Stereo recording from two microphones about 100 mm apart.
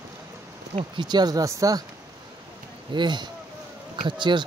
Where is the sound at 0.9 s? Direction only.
45° right (ahead or behind).